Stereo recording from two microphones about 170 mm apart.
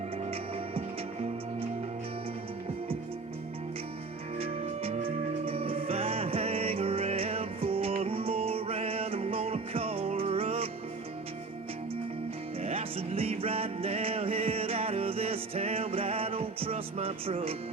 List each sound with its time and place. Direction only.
4.4 s music: 35° right (ahead or behind)
12.6 s music: 35° right (ahead or behind)